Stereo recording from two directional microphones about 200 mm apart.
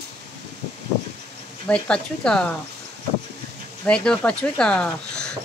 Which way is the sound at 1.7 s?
5° left (ahead or behind).